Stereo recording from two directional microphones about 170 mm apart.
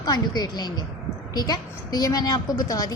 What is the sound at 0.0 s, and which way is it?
A woman's voice, 25° left (ahead or behind).